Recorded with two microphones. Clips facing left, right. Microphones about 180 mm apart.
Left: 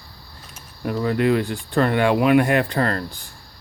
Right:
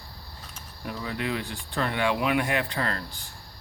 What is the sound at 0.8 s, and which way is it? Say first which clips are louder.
Speech: left 12 dB; 55° left (ahead or behind).